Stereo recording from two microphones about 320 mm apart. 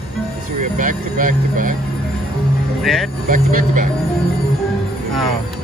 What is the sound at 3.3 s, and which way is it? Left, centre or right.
Speech, right.